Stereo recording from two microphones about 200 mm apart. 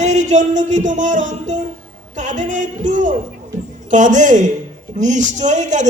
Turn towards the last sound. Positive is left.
turn(degrees=-35)  # may be behind; listen again after turning